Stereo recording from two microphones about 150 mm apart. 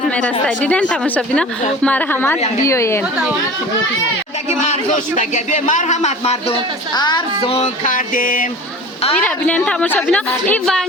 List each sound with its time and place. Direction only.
0.4 s a woman's voice: 10° left (ahead or behind)
4.4 s speech: 50° left (ahead or behind)
6.5 s speech: 30° left (ahead or behind)
7.9 s music: 65° left (ahead or behind)
9.2 s a woman's voice: 5° left (ahead or behind)